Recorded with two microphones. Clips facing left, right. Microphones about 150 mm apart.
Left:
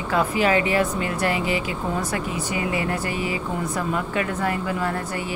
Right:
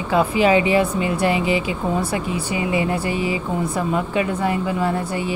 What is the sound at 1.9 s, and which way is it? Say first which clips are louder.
Speech: right 4 dB; 10° right (ahead or behind).